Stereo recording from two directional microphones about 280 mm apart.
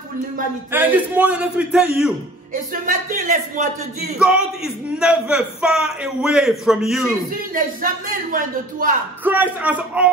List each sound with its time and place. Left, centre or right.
0.7 s a man's voice: centre
2.9 s a man's voice: right
4.2 s a man's voice: centre
7.5 s a man's voice: right
9.2 s a man's voice: centre